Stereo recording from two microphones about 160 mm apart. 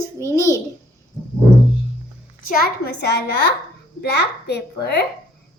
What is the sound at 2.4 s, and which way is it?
A child's voice, 65° left (ahead or behind).